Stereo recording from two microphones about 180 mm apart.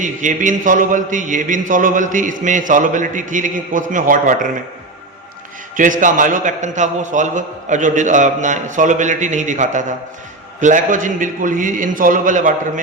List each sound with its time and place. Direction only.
0.0 s a man's voice: 45° right (ahead or behind)
5.7 s a man's voice: 45° right (ahead or behind)